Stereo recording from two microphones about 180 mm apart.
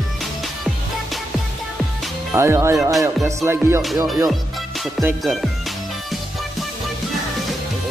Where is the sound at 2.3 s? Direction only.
15° right (ahead or behind).